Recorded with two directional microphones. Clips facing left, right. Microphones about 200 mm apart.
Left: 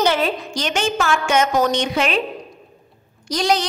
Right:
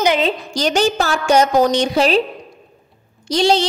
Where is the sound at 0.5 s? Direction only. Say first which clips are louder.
Right 5 dB; 35° right (ahead or behind).